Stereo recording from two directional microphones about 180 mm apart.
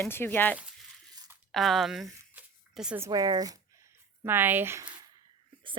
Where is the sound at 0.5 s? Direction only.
5° right (ahead or behind).